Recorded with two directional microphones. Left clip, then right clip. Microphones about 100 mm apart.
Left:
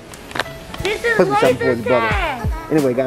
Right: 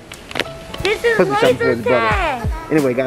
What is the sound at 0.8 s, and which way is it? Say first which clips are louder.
Music: right 2 dB; 20° right (ahead or behind).